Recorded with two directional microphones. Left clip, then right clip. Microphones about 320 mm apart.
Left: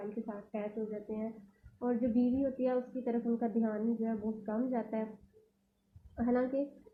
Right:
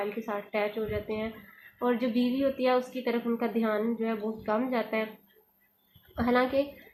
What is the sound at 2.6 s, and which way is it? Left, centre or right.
A woman's voice, centre.